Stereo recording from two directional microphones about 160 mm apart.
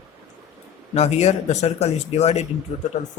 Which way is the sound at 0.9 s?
45° left (ahead or behind).